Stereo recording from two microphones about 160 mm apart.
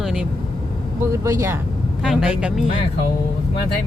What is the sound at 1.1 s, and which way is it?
Speech, 20° right (ahead or behind).